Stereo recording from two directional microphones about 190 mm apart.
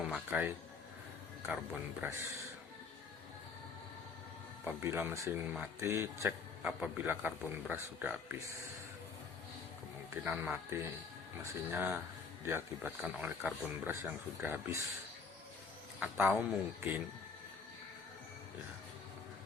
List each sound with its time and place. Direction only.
0.0 s a man's voice: 5° right (ahead or behind)
2.0 s speech: 15° right (ahead or behind)
4.6 s speech: 10° right (ahead or behind)
10.2 s speech: 5° right (ahead or behind)
16.0 s speech: 10° right (ahead or behind)